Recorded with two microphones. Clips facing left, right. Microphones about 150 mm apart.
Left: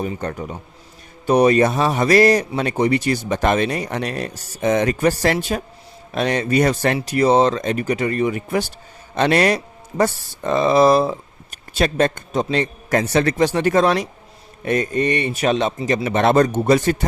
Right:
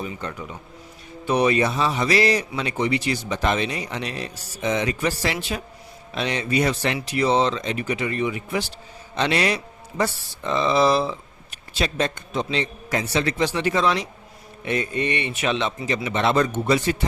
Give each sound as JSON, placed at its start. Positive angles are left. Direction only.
{"t": 0.0, "sound": "speech", "side_deg": 45}